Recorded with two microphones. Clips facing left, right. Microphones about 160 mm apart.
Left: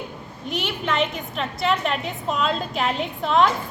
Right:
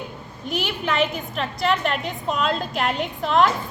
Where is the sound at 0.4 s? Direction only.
Centre (ahead or behind).